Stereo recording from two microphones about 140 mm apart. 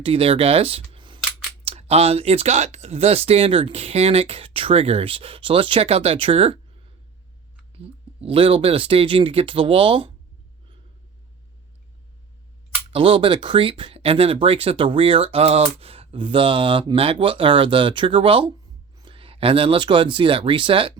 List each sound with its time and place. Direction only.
0.0 s speech: 40° right (ahead or behind)
1.6 s speech: 45° right (ahead or behind)
7.8 s speech: 40° right (ahead or behind)
12.9 s speech: 40° right (ahead or behind)